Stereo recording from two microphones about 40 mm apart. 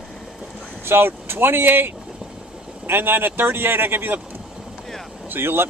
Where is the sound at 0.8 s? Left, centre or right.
Right.